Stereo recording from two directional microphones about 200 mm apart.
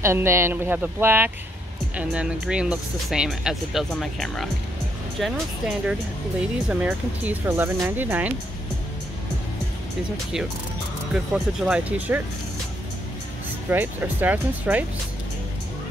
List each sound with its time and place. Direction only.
0.0 s speech: 15° right (ahead or behind)
11.1 s speech: 5° right (ahead or behind)
13.7 s speech: 10° right (ahead or behind)